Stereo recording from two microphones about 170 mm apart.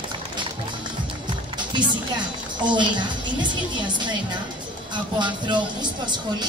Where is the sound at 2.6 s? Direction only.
25° right (ahead or behind).